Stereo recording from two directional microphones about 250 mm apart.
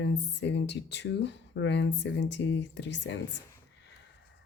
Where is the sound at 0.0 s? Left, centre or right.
Left.